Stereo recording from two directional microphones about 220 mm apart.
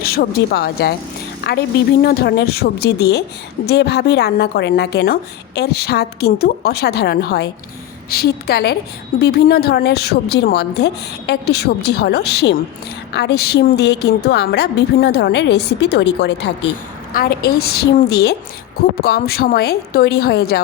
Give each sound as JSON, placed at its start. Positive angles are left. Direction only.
{"t": 0.0, "sound": "a woman's voice", "side_deg": 45}